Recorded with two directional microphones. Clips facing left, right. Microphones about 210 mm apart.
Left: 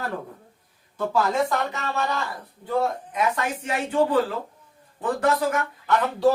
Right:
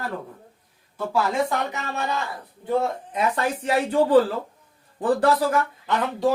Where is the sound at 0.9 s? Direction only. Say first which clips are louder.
Left 1 dB; 10° right (ahead or behind).